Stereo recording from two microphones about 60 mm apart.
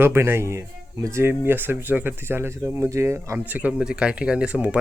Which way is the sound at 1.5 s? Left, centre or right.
Right.